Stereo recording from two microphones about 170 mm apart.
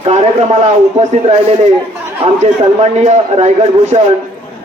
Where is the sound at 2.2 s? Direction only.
35° right (ahead or behind).